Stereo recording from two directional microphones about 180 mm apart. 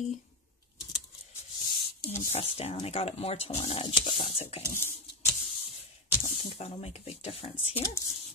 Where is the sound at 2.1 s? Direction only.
35° left (ahead or behind).